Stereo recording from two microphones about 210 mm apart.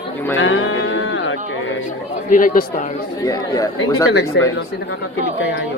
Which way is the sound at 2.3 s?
40° left (ahead or behind).